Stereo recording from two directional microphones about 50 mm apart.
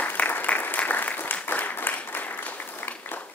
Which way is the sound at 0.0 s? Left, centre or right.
Left.